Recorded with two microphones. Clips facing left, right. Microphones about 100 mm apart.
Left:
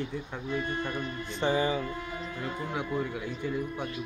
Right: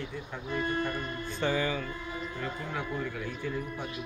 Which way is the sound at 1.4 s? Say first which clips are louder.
Left 3 dB; 25° left (ahead or behind).